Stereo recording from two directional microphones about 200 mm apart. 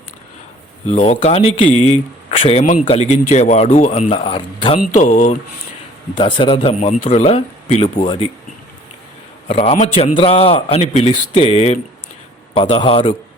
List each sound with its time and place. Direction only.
0.9 s speech: 35° left (ahead or behind)
6.1 s a man's voice: 25° left (ahead or behind)
9.5 s a man's voice: 30° left (ahead or behind)